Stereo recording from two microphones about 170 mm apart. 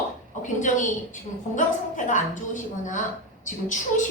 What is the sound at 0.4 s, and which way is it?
Speech, 45° left (ahead or behind).